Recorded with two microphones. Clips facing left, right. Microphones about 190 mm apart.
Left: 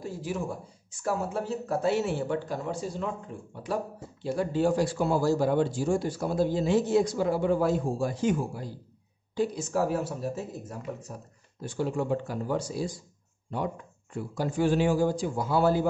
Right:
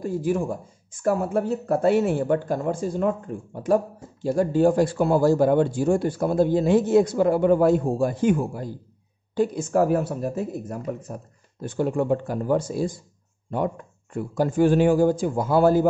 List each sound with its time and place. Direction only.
0.0 s speech: 50° right (ahead or behind)
14.1 s speech: 50° right (ahead or behind)